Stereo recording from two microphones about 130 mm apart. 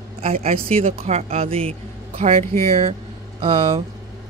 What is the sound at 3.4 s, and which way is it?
Speech, 40° right (ahead or behind).